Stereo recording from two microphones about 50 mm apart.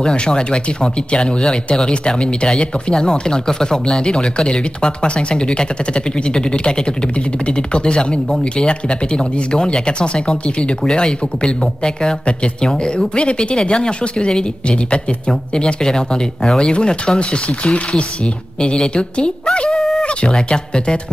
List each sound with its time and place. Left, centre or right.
0.0 s speech: centre
20.0 s a sound: left
20.3 s speech: centre